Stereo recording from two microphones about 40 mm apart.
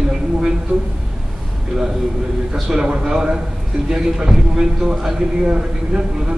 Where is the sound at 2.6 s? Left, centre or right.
Centre.